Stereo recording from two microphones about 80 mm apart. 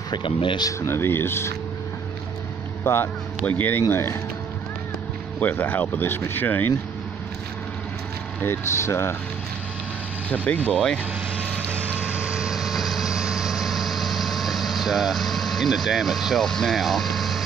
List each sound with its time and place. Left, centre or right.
0.1 s speech: left
0.7 s speech: left
2.8 s speech: left
3.9 s speech: left
5.4 s speech: left
8.4 s speech: left
10.3 s speech: centre
11.5 s vehicle: right; by 17.4 s centre